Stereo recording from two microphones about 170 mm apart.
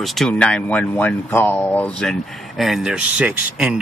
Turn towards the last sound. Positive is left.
turn(degrees=-5)  # may be behind; listen again after turning